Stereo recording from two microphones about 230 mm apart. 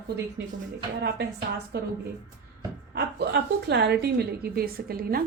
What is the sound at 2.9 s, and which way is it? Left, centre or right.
A woman's voice, right.